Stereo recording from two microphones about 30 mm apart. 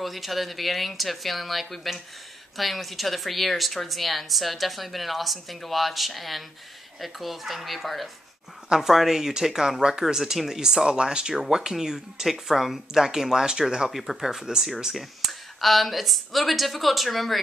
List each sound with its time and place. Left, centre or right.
0.0 s speech: centre
8.6 s speech: centre
10.9 s speech: right
13.8 s speech: centre
15.0 s speech: centre